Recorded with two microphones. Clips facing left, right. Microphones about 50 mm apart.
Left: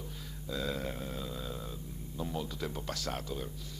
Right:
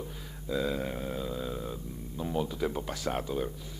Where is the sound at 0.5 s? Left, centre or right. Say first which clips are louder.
Right 5 dB; centre.